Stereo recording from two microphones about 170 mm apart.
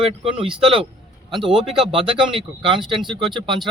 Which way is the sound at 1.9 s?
30° right (ahead or behind).